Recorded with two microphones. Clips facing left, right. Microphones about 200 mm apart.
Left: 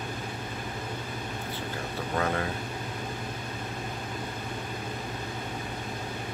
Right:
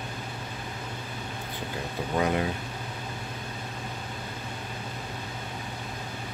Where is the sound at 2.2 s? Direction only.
15° right (ahead or behind).